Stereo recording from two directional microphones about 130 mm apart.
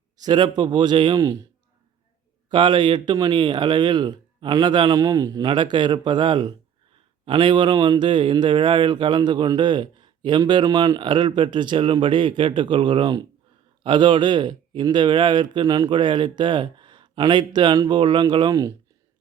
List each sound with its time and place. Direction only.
0.2 s a man's voice: 35° right (ahead or behind)
2.5 s a man's voice: 35° right (ahead or behind)